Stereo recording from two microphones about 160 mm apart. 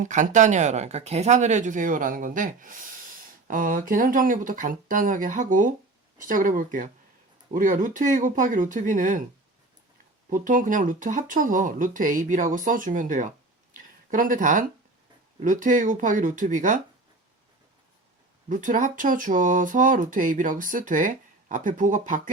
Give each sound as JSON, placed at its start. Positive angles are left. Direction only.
{"t": 0.0, "sound": "speech", "side_deg": -50}
{"t": 10.2, "sound": "speech", "side_deg": -55}
{"t": 13.7, "sound": "a sound", "side_deg": -55}
{"t": 15.4, "sound": "speech", "side_deg": -55}
{"t": 18.4, "sound": "speech", "side_deg": -55}